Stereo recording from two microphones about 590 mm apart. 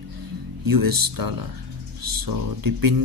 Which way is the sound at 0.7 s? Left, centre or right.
Right.